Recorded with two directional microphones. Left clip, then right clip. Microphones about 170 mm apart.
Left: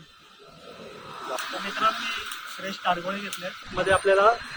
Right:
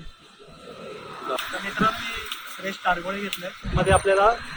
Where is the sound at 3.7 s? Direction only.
Centre (ahead or behind).